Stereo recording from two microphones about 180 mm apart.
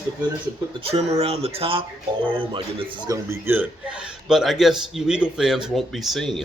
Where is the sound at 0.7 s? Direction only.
30° right (ahead or behind).